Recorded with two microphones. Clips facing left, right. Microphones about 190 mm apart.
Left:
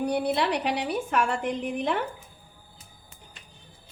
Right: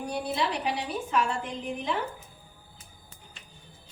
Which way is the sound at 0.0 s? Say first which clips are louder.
Left 5 dB; 65° left (ahead or behind).